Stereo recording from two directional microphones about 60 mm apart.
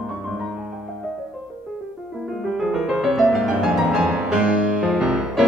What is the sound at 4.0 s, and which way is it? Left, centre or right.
Music, centre.